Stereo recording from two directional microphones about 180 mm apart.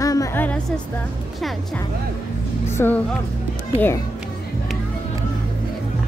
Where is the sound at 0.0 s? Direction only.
20° left (ahead or behind).